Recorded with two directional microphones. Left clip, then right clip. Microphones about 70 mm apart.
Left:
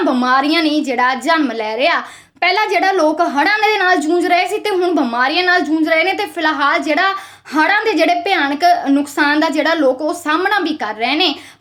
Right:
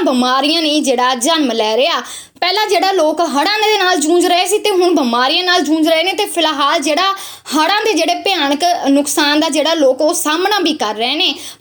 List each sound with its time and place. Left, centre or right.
0.0 s a woman's voice: right